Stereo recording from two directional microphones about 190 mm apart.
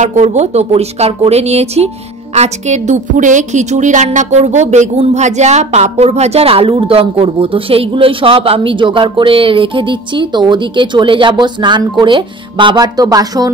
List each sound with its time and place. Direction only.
0.0 s a woman's voice: 40° right (ahead or behind); by 13.5 s 20° right (ahead or behind)